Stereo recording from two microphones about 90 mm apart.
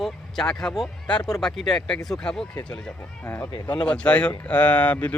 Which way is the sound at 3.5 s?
60° left (ahead or behind).